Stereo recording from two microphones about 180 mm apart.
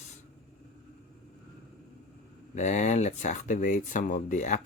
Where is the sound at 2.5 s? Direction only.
40° left (ahead or behind).